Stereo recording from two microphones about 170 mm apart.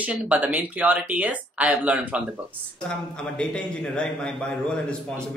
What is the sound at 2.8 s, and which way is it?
A man's voice, 5° left (ahead or behind).